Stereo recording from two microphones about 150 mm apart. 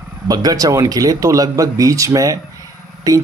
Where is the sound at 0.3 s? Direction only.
25° right (ahead or behind).